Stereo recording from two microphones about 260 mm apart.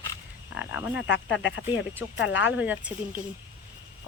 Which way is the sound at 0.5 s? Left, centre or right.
Centre.